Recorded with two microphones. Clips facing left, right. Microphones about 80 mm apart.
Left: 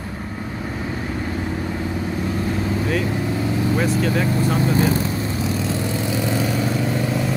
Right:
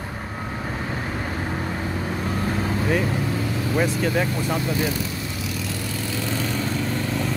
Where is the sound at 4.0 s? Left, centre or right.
Centre.